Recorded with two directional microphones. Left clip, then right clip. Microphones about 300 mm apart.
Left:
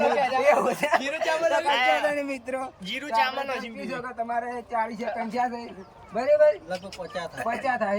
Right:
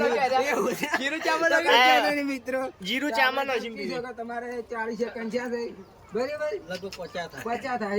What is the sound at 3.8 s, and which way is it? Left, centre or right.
A man's voice, centre.